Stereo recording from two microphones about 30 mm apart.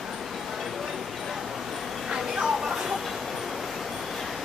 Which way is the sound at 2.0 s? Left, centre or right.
Centre.